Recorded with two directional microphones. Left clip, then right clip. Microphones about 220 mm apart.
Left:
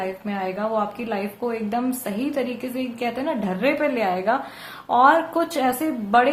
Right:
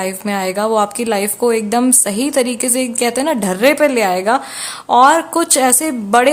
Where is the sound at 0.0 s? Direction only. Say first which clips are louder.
Right 8 dB; 45° right (ahead or behind).